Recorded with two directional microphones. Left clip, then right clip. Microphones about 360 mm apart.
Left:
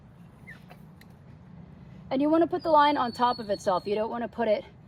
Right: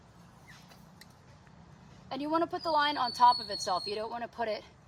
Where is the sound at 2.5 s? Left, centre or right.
Centre.